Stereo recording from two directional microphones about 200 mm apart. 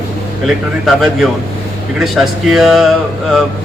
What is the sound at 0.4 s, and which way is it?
A man's voice, centre (ahead or behind).